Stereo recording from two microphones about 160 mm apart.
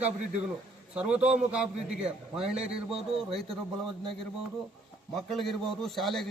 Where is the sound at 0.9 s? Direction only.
5° right (ahead or behind).